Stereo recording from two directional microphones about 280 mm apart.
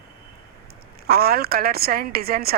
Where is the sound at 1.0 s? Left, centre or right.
Right.